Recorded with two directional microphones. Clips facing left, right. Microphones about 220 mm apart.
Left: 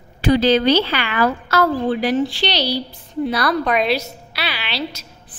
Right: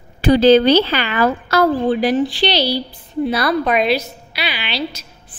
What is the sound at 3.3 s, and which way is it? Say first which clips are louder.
Speech: right 2 dB; 25° right (ahead or behind).